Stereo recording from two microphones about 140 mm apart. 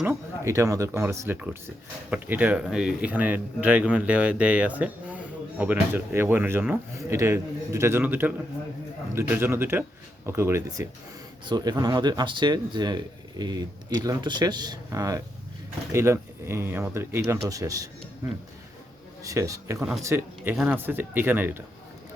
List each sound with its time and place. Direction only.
0.0 s speech: 15° right (ahead or behind)
11.4 s speech: 30° right (ahead or behind)
19.2 s speech: 25° right (ahead or behind)